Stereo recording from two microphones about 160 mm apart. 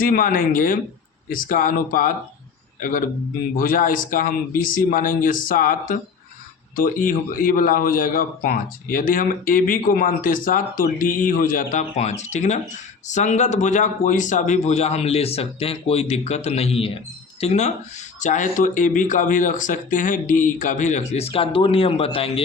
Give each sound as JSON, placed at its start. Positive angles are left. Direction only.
{"t": 0.0, "sound": "a man's voice", "side_deg": 60}
{"t": 3.6, "sound": "a man's voice", "side_deg": 60}